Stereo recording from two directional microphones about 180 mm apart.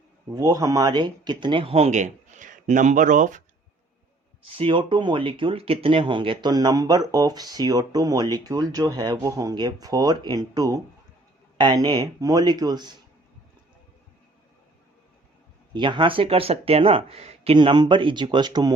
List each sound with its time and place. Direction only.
0.3 s speech: 20° right (ahead or behind); by 3.4 s 45° right (ahead or behind)
4.5 s speech: 30° right (ahead or behind)
15.7 s speech: 25° right (ahead or behind)